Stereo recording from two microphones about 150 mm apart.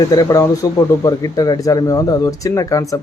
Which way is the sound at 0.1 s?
25° left (ahead or behind).